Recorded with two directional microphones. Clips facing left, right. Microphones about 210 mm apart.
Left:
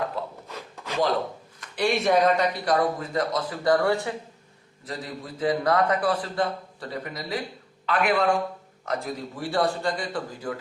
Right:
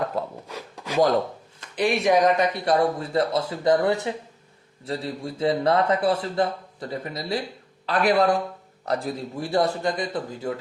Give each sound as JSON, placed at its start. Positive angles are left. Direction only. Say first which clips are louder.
{"t": 0.4, "sound": "rub", "louder": "right 3 dB", "side_deg": -10}
{"t": 1.6, "sound": "speech", "louder": "right 2 dB", "side_deg": -20}
{"t": 2.6, "sound": "a man's voice", "louder": "right 2 dB", "side_deg": -30}